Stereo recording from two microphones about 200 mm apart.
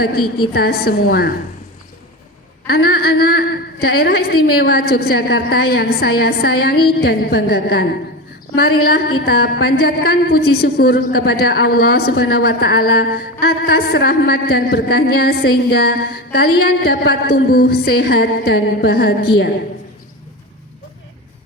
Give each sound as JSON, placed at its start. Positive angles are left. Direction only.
{"t": 0.0, "sound": "a woman's voice", "side_deg": 50}
{"t": 2.6, "sound": "a woman's voice", "side_deg": 50}